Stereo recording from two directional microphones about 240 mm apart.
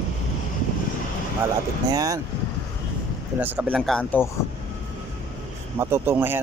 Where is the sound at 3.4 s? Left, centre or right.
Centre.